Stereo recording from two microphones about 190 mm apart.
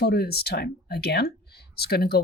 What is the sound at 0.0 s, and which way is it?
Speech, 55° left (ahead or behind).